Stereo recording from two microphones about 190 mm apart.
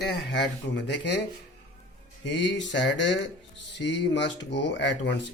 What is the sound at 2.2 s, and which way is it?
Speech, 70° left (ahead or behind).